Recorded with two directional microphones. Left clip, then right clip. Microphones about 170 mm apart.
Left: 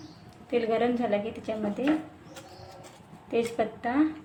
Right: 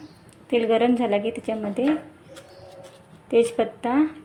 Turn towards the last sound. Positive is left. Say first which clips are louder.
# right 5 dB
turn(degrees=-30)  # may be behind; listen again after turning